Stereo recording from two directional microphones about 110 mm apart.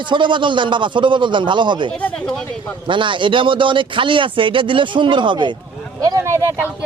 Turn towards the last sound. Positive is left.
turn(degrees=-20)  # may be behind; listen again after turning